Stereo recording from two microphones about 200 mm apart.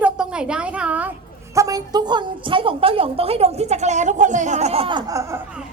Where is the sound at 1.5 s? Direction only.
15° right (ahead or behind).